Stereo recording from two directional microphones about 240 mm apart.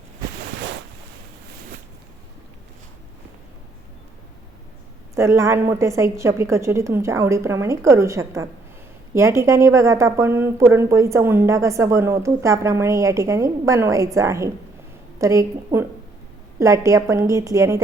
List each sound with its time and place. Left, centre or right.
5.1 s a woman's voice: centre